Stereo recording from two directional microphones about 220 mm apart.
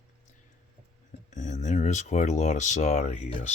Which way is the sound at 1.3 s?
35° left (ahead or behind).